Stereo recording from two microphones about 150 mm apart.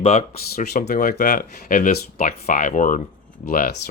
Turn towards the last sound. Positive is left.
turn(degrees=80)